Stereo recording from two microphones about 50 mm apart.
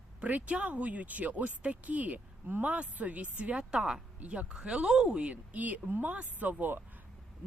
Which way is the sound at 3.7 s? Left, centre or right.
Centre.